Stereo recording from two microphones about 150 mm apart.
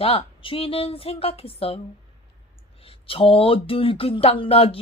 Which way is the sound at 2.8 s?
40° left (ahead or behind).